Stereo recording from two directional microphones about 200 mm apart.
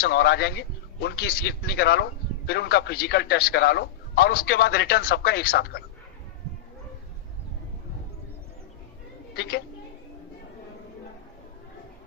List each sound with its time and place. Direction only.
0.0 s a man's voice: 50° left (ahead or behind)
9.3 s a woman's voice: 50° left (ahead or behind)